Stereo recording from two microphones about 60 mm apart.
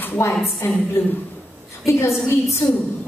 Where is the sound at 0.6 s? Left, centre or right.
Left.